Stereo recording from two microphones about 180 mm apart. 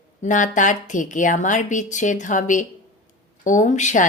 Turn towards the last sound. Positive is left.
turn(degrees=45)  # may be behind; listen again after turning